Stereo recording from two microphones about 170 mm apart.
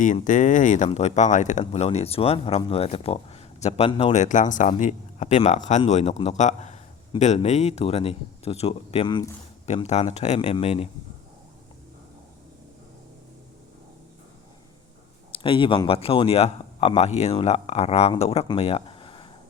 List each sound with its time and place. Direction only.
0.0 s speech: 50° left (ahead or behind); by 9.3 s 30° left (ahead or behind)
9.6 s speech: 40° left (ahead or behind)
15.3 s speech: 30° left (ahead or behind)
18.4 s a sound: 30° left (ahead or behind)